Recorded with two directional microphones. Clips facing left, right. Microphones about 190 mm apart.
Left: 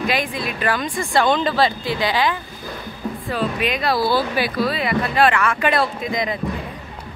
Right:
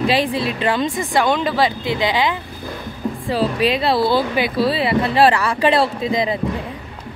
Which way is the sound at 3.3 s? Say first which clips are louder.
Right 5 dB; 30° right (ahead or behind).